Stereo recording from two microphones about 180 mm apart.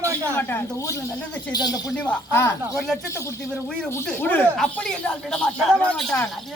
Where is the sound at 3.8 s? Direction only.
10° left (ahead or behind).